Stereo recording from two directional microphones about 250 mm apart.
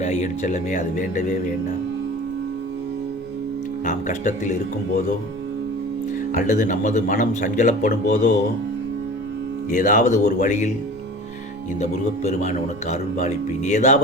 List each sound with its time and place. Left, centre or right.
0.0 s speech: left
3.8 s speech: left
6.3 s speech: left
9.6 s speech: left
11.8 s speech: left